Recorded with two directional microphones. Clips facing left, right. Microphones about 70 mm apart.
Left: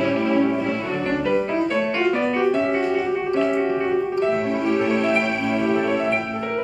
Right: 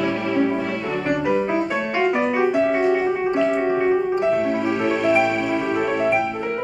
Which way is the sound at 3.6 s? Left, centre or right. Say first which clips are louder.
Right 2 dB; right.